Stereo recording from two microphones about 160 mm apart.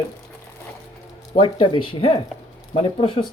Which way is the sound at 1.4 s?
30° left (ahead or behind).